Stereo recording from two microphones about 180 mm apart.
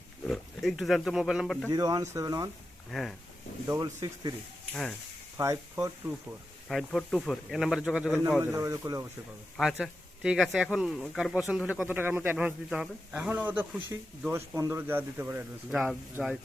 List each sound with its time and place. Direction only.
0.3 s speech: centre (ahead or behind)
1.7 s speech: 20° right (ahead or behind)
2.9 s speech: centre (ahead or behind)
3.7 s speech: 20° right (ahead or behind)
4.7 s speech: 5° left (ahead or behind)
5.4 s speech: 15° right (ahead or behind)
6.7 s speech: centre (ahead or behind)
8.5 s speech: 20° right (ahead or behind)
9.6 s speech: centre (ahead or behind)
15.7 s speech: centre (ahead or behind)